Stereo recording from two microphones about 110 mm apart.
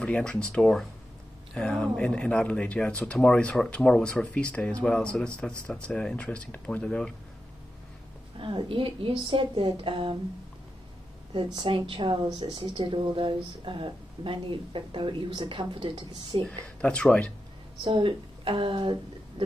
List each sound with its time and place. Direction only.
0.0 s speech: 10° left (ahead or behind)
8.4 s speech: 50° right (ahead or behind)
11.3 s speech: 50° right (ahead or behind)
16.4 s speech: 10° left (ahead or behind)
17.8 s speech: 50° right (ahead or behind)